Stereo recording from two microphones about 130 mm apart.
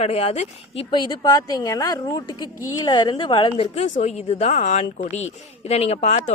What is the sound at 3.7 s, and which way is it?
A woman's voice, 70° left (ahead or behind).